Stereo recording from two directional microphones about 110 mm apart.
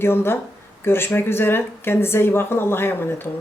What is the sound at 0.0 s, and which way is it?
Speech, 20° left (ahead or behind).